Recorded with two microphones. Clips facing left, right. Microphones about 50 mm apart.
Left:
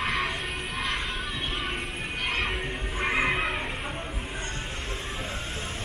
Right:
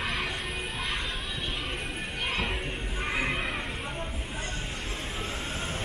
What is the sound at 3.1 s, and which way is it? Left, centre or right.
Music, left.